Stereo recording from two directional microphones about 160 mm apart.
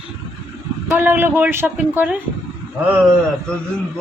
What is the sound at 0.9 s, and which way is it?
A man's voice, 10° right (ahead or behind).